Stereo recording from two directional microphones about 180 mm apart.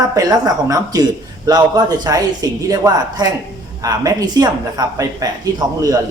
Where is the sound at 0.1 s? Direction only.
20° right (ahead or behind).